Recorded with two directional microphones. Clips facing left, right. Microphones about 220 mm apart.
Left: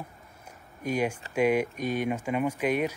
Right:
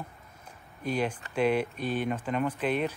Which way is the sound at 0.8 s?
10° left (ahead or behind).